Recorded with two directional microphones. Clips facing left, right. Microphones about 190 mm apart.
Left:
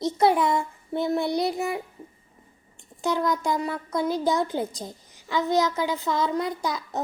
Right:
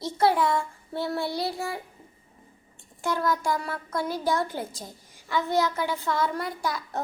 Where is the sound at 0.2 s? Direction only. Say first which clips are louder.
Left 1 dB; 20° left (ahead or behind).